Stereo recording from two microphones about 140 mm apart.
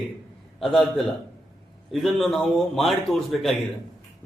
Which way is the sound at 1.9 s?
Centre (ahead or behind).